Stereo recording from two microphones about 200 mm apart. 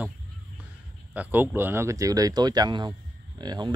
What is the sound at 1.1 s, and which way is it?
Speech, 10° right (ahead or behind).